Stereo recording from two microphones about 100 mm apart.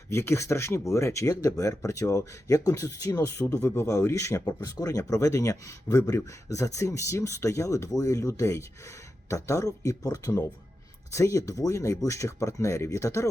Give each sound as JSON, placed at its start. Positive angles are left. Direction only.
{"t": 0.1, "sound": "speech", "side_deg": 25}